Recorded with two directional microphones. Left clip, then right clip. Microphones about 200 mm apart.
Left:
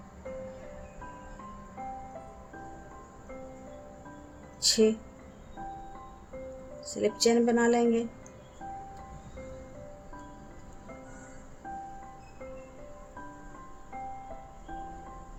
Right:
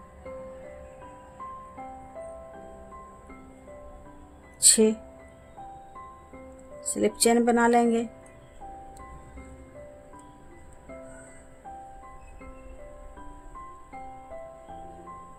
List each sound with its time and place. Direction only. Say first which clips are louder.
4.6 s music: right 3 dB; 40° right (ahead or behind)
6.9 s speech: right 3 dB; 35° right (ahead or behind)